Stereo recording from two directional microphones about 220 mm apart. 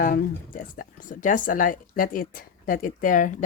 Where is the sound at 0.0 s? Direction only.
40° left (ahead or behind).